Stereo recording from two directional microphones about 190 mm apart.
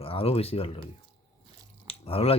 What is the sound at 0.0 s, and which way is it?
Speech, 30° left (ahead or behind).